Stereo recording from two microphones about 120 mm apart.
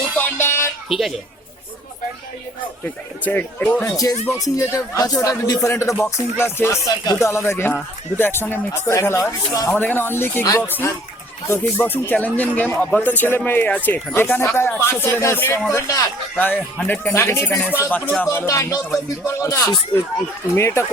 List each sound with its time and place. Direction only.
0.2 s music: 20° left (ahead or behind)
0.9 s speech: centre (ahead or behind)
3.2 s a man's voice: 15° left (ahead or behind)
3.8 s speech: 30° left (ahead or behind)
9.7 s a man's voice: 15° left (ahead or behind)
16.4 s a man's voice: 15° left (ahead or behind)